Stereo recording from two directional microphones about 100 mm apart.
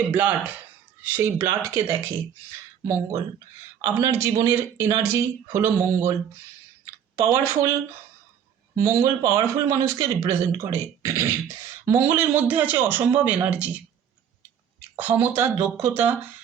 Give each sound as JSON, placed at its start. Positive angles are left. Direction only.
{"t": 0.1, "sound": "a man's voice", "side_deg": -15}
{"t": 8.7, "sound": "a man's voice", "side_deg": -30}
{"t": 14.9, "sound": "a man's voice", "side_deg": -20}